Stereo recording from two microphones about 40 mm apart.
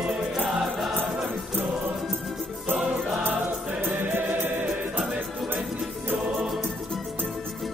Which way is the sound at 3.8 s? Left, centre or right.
Right.